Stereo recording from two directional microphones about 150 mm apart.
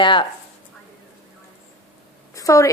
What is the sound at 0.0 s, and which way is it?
Speech, 30° left (ahead or behind).